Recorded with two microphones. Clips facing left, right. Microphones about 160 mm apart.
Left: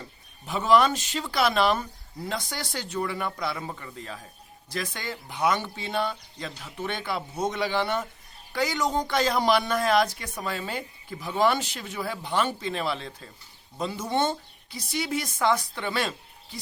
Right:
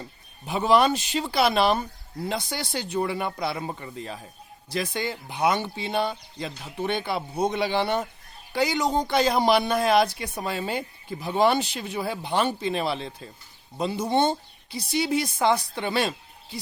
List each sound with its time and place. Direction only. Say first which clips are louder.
0.4 s speech: right 1 dB; 20° right (ahead or behind)
1.2 s speech: right 1 dB; 25° right (ahead or behind)
14.0 s speech: right 4 dB; 30° right (ahead or behind)